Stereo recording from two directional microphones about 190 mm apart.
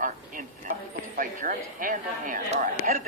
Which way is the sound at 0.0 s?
45° right (ahead or behind).